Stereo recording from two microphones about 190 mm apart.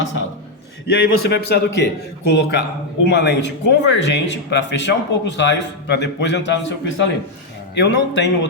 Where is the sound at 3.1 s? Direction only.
65° left (ahead or behind).